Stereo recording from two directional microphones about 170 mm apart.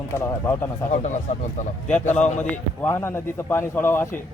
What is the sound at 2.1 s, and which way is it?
Speech, 45° left (ahead or behind).